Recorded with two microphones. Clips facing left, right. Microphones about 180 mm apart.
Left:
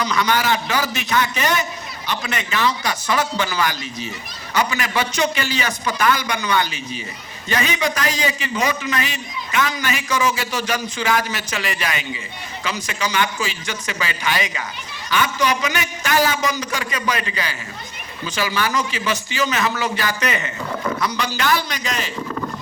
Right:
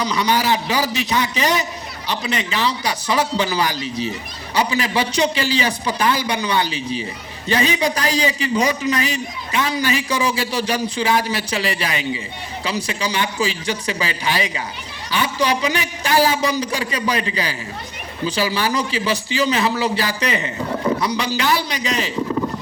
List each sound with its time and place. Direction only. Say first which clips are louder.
0.0 s a man's voice: right 1 dB; 35° right (ahead or behind)